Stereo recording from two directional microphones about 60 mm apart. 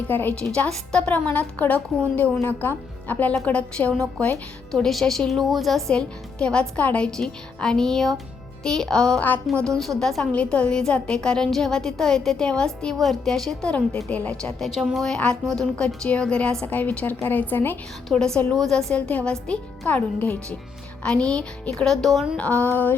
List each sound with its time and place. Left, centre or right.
0.1 s a woman's voice: left
0.3 s a woman's voice: centre
1.1 s a woman's voice: left
3.4 s a woman's voice: centre
4.7 s a woman's voice: centre
5.9 s a woman's voice: centre
13.7 s a woman's voice: centre
14.6 s a woman's voice: centre
16.0 s a woman's voice: centre
16.6 s a woman's voice: left
18.1 s a woman's voice: centre
18.9 s a woman's voice: centre
21.8 s a woman's voice: centre
22.4 s a woman's voice: left